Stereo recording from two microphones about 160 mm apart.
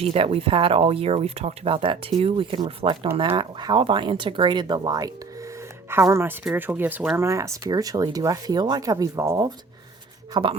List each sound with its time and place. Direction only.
0.0 s speech: 35° right (ahead or behind); by 9.5 s 20° right (ahead or behind)
10.3 s speech: 30° right (ahead or behind)